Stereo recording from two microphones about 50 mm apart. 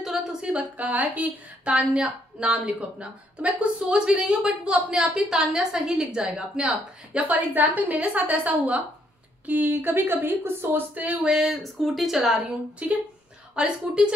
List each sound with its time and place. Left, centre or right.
0.0 s a sound: centre
0.4 s a sound: centre
0.7 s a woman's voice: right; by 6.7 s centre
7.2 s a woman's voice: right
9.5 s speech: right
11.2 s speech: centre
12.8 s a woman's voice: right